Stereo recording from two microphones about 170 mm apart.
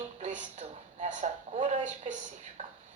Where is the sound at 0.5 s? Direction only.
45° right (ahead or behind).